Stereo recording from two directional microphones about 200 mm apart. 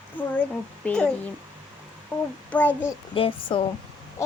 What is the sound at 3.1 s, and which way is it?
Speech, 25° left (ahead or behind).